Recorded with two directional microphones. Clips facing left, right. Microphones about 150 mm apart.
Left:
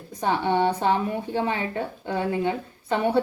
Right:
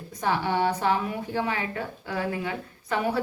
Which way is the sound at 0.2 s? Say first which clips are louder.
Left 3 dB; 25° left (ahead or behind).